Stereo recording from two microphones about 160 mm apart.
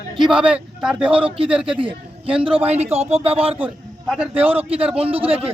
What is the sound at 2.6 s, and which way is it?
Speech, 40° right (ahead or behind).